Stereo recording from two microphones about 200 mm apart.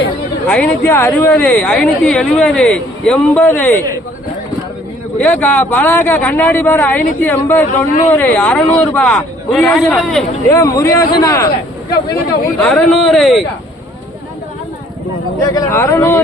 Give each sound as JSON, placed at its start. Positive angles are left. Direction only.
{"t": 0.4, "sound": "speech", "side_deg": 5}
{"t": 5.1, "sound": "speech", "side_deg": 5}
{"t": 10.5, "sound": "speech", "side_deg": 15}
{"t": 15.4, "sound": "speech", "side_deg": 15}